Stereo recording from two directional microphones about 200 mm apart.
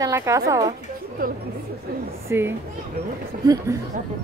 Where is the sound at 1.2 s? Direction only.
45° right (ahead or behind).